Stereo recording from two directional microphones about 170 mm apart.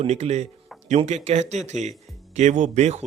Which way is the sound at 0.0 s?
40° right (ahead or behind).